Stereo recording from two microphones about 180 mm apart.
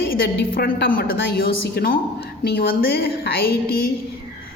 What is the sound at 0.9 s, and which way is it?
A woman's voice, 60° left (ahead or behind).